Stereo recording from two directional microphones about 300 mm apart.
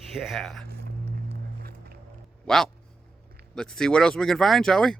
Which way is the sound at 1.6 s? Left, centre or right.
Right.